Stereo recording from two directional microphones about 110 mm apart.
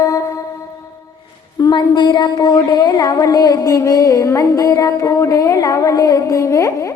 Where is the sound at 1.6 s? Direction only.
40° left (ahead or behind).